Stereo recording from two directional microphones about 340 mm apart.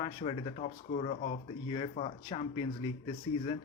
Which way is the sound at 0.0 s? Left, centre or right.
Centre.